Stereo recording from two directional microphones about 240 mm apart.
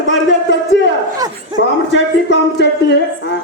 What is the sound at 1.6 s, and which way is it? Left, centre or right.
Speech, left.